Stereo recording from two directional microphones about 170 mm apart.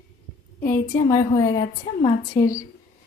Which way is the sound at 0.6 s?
20° left (ahead or behind).